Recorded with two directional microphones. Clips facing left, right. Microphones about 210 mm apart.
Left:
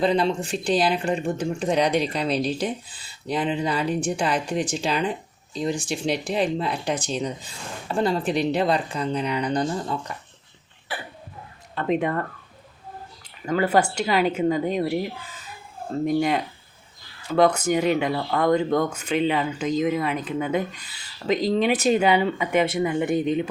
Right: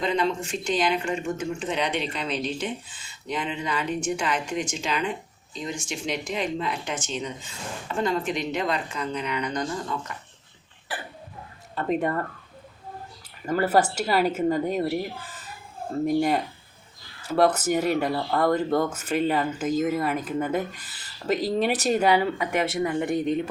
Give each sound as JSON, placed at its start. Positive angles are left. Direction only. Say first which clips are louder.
{"t": 0.0, "sound": "speech", "louder": "left 4 dB", "side_deg": 35}
{"t": 11.7, "sound": "speech", "louder": "left 2 dB", "side_deg": 0}
{"t": 13.4, "sound": "speech", "louder": "left 1 dB", "side_deg": -5}
{"t": 16.0, "sound": "speech", "louder": "left 1 dB", "side_deg": 0}